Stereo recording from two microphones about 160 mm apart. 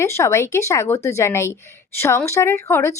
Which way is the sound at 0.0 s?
20° left (ahead or behind).